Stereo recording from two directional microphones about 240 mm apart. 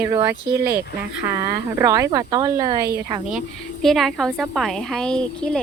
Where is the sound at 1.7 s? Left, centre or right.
Centre.